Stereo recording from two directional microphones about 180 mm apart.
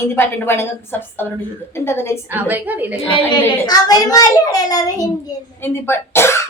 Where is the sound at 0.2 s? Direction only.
10° left (ahead or behind).